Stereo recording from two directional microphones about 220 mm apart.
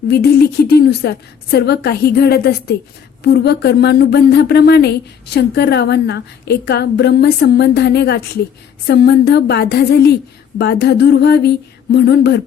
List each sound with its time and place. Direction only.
0.1 s speech: 50° left (ahead or behind)